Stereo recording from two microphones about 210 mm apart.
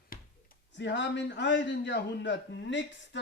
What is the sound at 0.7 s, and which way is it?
A man's voice, 55° left (ahead or behind).